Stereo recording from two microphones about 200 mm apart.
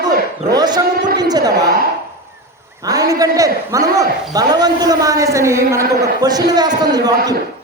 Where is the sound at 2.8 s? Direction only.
15° right (ahead or behind).